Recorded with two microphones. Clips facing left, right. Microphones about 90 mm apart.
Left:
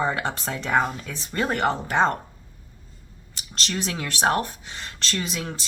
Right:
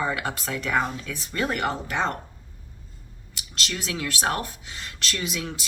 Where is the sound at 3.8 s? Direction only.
35° left (ahead or behind).